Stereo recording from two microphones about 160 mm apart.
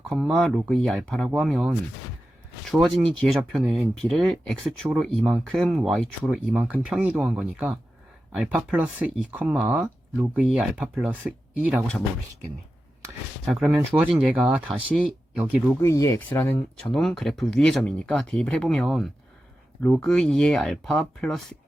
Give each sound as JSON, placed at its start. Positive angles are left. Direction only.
{"t": 0.1, "sound": "speech", "side_deg": 0}
{"t": 6.5, "sound": "speech", "side_deg": -10}
{"t": 13.4, "sound": "speech", "side_deg": 0}
{"t": 15.8, "sound": "speech", "side_deg": 20}
{"t": 16.8, "sound": "speech", "side_deg": 0}